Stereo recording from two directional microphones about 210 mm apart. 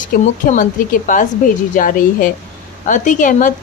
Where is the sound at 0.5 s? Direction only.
40° left (ahead or behind).